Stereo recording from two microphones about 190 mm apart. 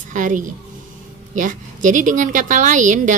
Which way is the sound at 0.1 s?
45° right (ahead or behind).